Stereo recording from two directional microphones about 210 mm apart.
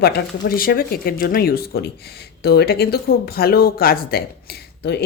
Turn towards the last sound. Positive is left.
turn(degrees=50)  # may be behind; listen again after turning